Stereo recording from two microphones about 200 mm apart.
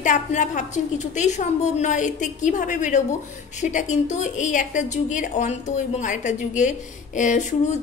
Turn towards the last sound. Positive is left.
turn(degrees=40)  # may be behind; listen again after turning